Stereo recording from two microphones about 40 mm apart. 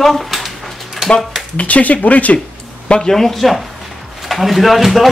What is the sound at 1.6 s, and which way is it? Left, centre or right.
Speech, left.